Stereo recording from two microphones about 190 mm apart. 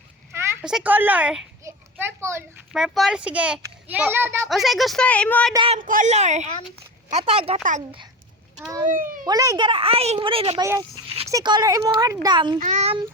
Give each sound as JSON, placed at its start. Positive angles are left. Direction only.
{"t": 0.3, "sound": "a woman's voice", "side_deg": -10}
{"t": 1.6, "sound": "children playing", "side_deg": -15}
{"t": 2.7, "sound": "a child's voice", "side_deg": 0}
{"t": 4.4, "sound": "speech", "side_deg": 0}
{"t": 5.5, "sound": "speech", "side_deg": -30}
{"t": 5.8, "sound": "a woman's voice", "side_deg": -45}
{"t": 7.6, "sound": "a woman's voice", "side_deg": -40}
{"t": 8.9, "sound": "a child's voice", "side_deg": -45}
{"t": 9.2, "sound": "speech", "side_deg": -20}
{"t": 10.6, "sound": "speech", "side_deg": -20}
{"t": 12.5, "sound": "a woman's voice", "side_deg": -40}